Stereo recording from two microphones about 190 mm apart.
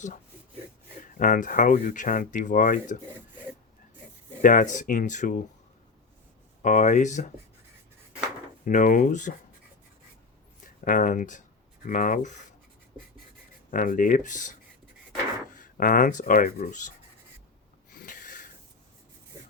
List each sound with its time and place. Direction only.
1.1 s speech: 45° left (ahead or behind)
4.4 s speech: 45° left (ahead or behind)
6.6 s speech: 40° left (ahead or behind)
8.6 s speech: 45° left (ahead or behind)
10.8 s speech: 45° left (ahead or behind)
13.7 s speech: 45° left (ahead or behind)
15.5 s speech: 45° left (ahead or behind)
17.9 s a sound: 45° left (ahead or behind)